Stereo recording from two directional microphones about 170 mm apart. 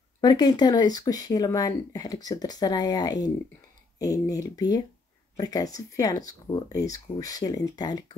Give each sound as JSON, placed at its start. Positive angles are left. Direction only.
{"t": 0.2, "sound": "speech", "side_deg": 25}